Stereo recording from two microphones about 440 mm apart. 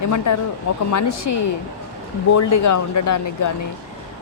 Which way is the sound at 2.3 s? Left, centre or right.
Left.